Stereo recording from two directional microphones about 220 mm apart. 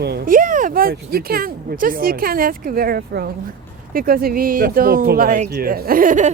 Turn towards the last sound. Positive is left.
turn(degrees=-35)  # may be behind; listen again after turning